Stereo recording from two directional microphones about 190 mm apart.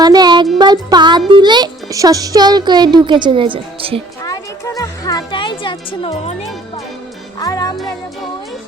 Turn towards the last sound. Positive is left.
turn(degrees=20)  # may be behind; listen again after turning